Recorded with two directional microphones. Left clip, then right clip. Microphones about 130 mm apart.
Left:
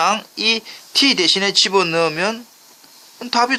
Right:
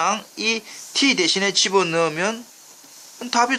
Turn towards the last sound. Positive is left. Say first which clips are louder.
# left 2 dB
turn(degrees=15)  # may be behind; listen again after turning